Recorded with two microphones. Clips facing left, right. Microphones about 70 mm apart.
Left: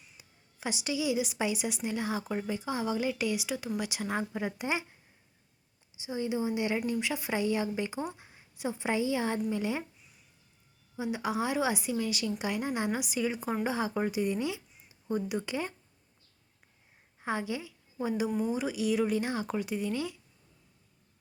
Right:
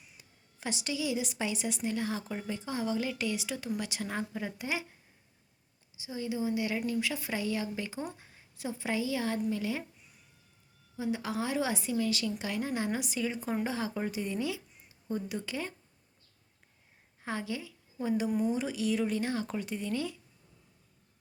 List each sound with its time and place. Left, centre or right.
0.2 s a woman's voice: centre; by 4.9 s left
6.0 s a woman's voice: left
10.9 s a woman's voice: centre
17.2 s a sound: centre
18.3 s speech: centre
18.5 s a woman's voice: centre